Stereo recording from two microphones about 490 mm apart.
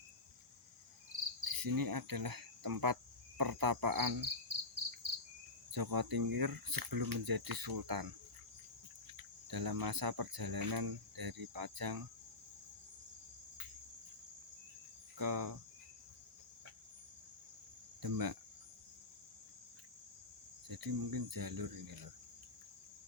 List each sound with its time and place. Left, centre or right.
1.4 s cricket: right
9.1 s cricket: right
15.2 s cricket: right
18.0 s cricket: right
20.7 s cricket: right